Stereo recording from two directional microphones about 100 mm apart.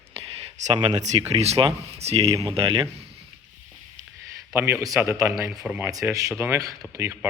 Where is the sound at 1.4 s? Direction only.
90° right.